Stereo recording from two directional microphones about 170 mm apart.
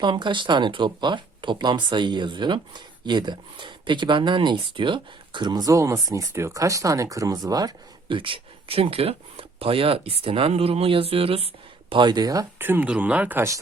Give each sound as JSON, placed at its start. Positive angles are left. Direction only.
{"t": 0.0, "sound": "speech", "side_deg": -30}